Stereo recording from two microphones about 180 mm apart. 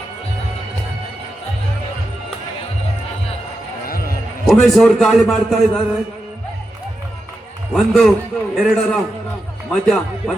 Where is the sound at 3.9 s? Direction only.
55° left (ahead or behind).